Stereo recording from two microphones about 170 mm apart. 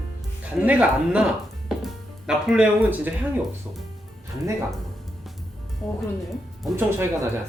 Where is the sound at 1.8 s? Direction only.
Centre (ahead or behind).